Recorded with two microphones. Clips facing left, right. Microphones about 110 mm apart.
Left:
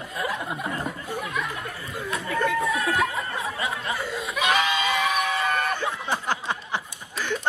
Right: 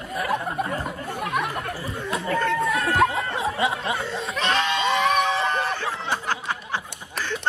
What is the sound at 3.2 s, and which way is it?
Snicker, 25° right (ahead or behind).